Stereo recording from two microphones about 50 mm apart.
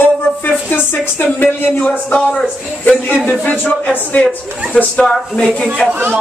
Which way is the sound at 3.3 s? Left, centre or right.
Left.